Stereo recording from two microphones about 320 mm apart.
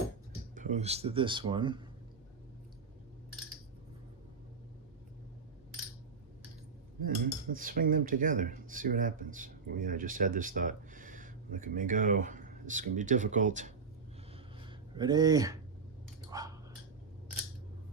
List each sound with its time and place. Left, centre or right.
0.5 s speech: right
7.0 s cutlery: right
14.6 s a sound: centre
16.3 s dog: centre